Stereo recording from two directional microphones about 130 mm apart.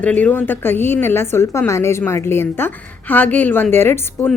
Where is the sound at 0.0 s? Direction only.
10° left (ahead or behind).